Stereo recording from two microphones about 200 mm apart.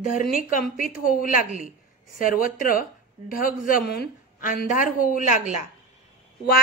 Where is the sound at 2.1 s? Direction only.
45° left (ahead or behind).